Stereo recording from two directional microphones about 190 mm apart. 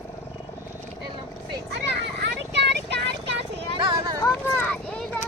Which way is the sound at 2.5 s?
65° right (ahead or behind).